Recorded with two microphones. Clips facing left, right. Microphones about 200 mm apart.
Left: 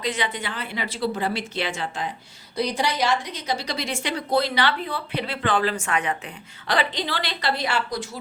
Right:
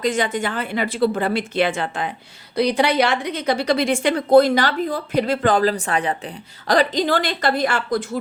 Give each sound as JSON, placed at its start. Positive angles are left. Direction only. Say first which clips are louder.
{"t": 0.0, "sound": "a woman's voice", "louder": "right 7 dB", "side_deg": -45}